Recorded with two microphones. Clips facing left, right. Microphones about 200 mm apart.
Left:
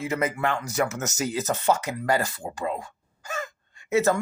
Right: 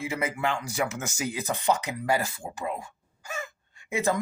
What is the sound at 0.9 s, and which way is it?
Speech, 40° left (ahead or behind).